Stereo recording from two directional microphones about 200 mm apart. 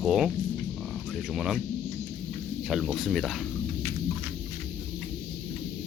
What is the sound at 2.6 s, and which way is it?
Speech, centre (ahead or behind).